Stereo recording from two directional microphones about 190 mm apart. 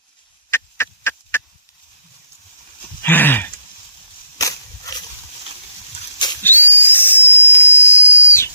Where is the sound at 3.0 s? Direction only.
10° left (ahead or behind).